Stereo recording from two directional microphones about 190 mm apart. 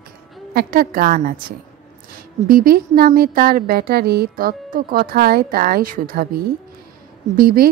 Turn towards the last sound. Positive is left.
turn(degrees=-50)  # may be behind; listen again after turning